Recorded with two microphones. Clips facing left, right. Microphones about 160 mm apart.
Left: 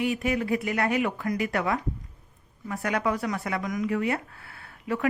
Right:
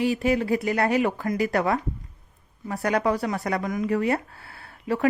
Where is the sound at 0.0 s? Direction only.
30° right (ahead or behind).